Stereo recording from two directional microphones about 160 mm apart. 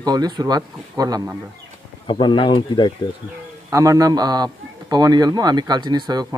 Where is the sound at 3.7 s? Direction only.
20° right (ahead or behind).